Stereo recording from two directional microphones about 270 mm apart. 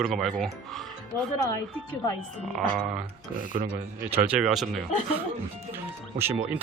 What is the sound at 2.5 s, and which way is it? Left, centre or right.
Speech, centre.